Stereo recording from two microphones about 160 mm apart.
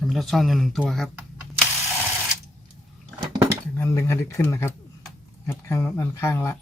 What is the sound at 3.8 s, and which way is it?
Speech, 15° left (ahead or behind).